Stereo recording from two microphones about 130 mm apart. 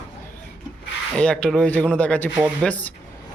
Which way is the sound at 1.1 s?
5° left (ahead or behind).